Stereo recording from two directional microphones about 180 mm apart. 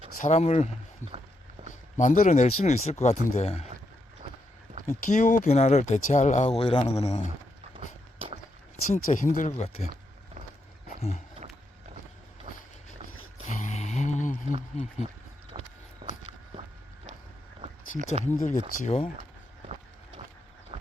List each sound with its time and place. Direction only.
0.2 s speech: 40° left (ahead or behind)
2.0 s speech: 45° left (ahead or behind)
5.0 s speech: 45° left (ahead or behind)
8.9 s speech: 45° left (ahead or behind)
13.5 s a sound: 40° left (ahead or behind)
14.7 s speech: 40° left (ahead or behind)
15.6 s walk: 30° right (ahead or behind)
17.6 s a sound: 35° right (ahead or behind)
18.2 s speech: 40° left (ahead or behind)